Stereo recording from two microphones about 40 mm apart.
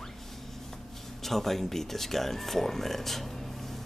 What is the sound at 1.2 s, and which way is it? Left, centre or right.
Speech, centre.